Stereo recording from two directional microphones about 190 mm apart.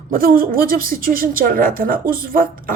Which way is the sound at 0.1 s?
50° right (ahead or behind).